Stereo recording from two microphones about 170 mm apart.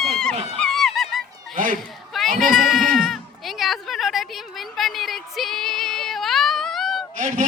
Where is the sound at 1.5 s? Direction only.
50° right (ahead or behind).